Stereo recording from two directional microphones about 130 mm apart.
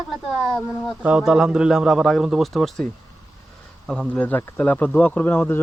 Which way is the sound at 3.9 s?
5° left (ahead or behind).